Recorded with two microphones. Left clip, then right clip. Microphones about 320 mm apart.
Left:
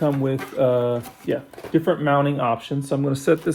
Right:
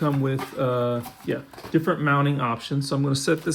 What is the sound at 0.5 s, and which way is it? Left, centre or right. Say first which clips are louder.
Speech: left 5 dB; left.